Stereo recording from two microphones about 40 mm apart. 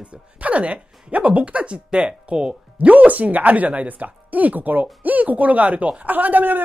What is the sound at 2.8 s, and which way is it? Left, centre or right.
Speech, right.